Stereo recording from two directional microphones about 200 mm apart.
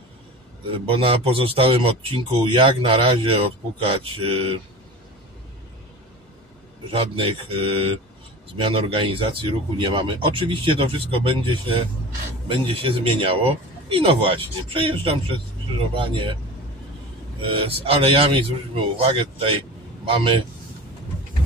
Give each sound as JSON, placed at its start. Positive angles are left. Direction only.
{"t": 0.8, "sound": "speech", "side_deg": -25}
{"t": 6.9, "sound": "speech", "side_deg": -30}
{"t": 17.4, "sound": "speech", "side_deg": -25}
{"t": 20.1, "sound": "speech", "side_deg": -25}